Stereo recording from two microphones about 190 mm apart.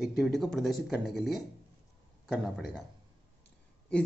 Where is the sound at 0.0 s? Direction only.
Centre (ahead or behind).